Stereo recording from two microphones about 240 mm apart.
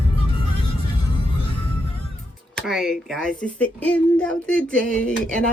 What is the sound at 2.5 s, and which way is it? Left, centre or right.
Speech, centre.